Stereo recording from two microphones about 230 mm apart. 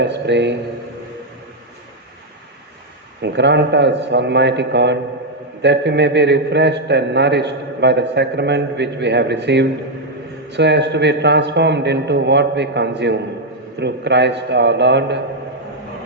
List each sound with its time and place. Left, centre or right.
0.0 s a man's voice: right
3.2 s a man's voice: right